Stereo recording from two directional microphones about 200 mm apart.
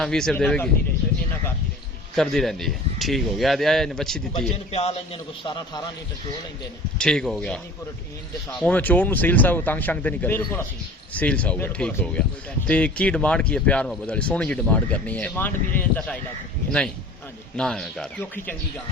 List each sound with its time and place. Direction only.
0.0 s speech: centre (ahead or behind)
2.1 s speech: centre (ahead or behind)
4.7 s a man's voice: 30° left (ahead or behind)
7.0 s speech: 5° left (ahead or behind)
8.6 s speech: 10° left (ahead or behind)
17.6 s speech: 5° left (ahead or behind)